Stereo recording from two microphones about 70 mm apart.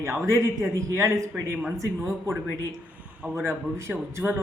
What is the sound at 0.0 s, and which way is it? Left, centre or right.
A man's voice, right.